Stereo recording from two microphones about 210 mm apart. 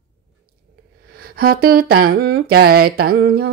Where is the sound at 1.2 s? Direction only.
45° right (ahead or behind).